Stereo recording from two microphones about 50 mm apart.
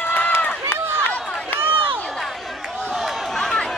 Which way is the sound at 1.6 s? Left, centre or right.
Right.